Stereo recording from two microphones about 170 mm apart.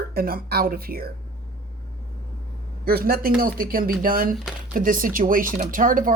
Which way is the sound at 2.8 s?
60° right (ahead or behind).